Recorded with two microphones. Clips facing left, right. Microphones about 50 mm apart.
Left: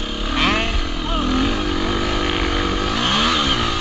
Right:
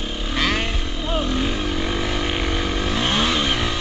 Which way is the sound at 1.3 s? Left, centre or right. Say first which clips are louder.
Left 4 dB; left.